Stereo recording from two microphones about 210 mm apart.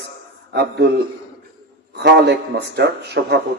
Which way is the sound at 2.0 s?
55° right (ahead or behind).